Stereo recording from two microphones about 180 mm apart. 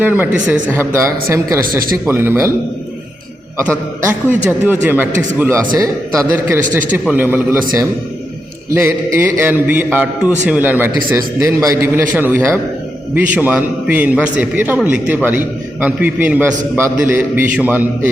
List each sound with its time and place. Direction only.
0.0 s a man's voice: 10° right (ahead or behind)
4.4 s a man's voice: 10° right (ahead or behind)
9.1 s a man's voice: 10° right (ahead or behind)